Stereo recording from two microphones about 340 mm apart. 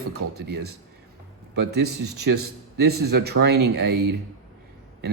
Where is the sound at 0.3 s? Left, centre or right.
Right.